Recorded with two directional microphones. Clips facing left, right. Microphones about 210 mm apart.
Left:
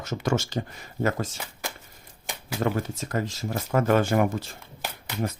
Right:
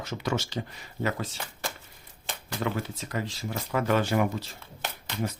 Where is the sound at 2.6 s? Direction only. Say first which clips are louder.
Left 4 dB; 45° left (ahead or behind).